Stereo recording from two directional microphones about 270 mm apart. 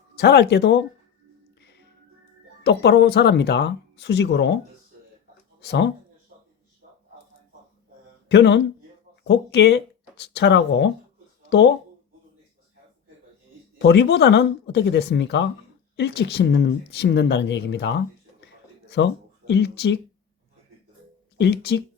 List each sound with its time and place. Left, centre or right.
0.2 s speech: left
2.6 s speech: left
6.8 s a sound: right
8.3 s speech: left
13.7 s speech: left
21.3 s speech: left